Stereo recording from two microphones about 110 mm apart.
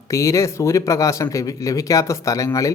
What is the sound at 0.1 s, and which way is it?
Speech, 30° left (ahead or behind).